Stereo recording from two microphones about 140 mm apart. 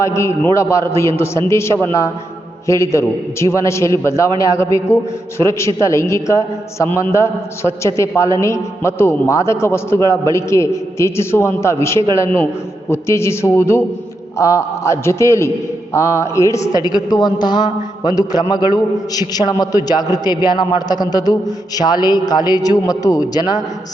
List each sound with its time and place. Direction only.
0.0 s a man's voice: 20° left (ahead or behind)